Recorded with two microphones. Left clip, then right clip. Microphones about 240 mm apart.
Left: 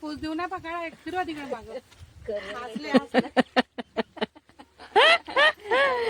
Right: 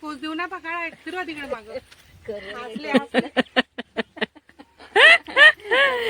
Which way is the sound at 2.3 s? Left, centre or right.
Right.